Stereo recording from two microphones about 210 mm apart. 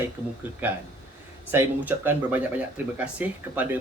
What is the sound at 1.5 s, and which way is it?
Speech, 10° right (ahead or behind).